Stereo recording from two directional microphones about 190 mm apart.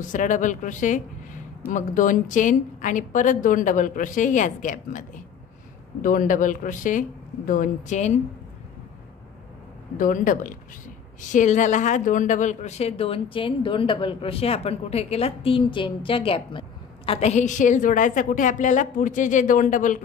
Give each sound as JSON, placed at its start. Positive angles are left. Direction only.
{"t": 0.1, "sound": "a woman's voice", "side_deg": 40}
{"t": 6.0, "sound": "a woman's voice", "side_deg": 45}
{"t": 9.9, "sound": "a woman's voice", "side_deg": 45}